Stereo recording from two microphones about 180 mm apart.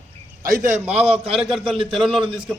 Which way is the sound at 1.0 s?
35° right (ahead or behind).